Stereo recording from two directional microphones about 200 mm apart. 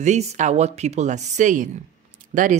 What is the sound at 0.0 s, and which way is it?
Speech, 35° right (ahead or behind).